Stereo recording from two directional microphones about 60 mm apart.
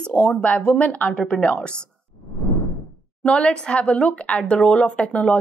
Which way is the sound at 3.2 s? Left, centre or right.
Centre.